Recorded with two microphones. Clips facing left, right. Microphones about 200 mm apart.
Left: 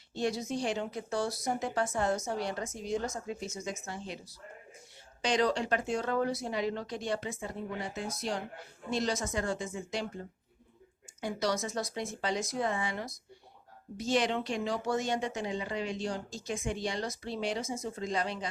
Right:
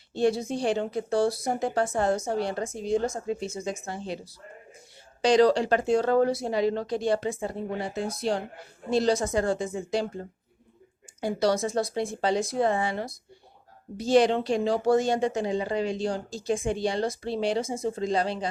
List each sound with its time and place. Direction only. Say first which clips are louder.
0.1 s speech: right 7 dB; 30° right (ahead or behind)